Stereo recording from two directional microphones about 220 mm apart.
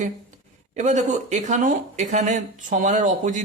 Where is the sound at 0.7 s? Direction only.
35° right (ahead or behind).